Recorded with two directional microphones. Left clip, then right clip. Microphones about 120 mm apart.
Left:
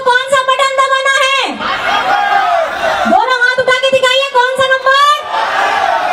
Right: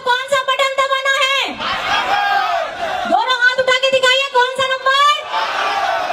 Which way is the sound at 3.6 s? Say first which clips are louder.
Left 3 dB; 25° right (ahead or behind).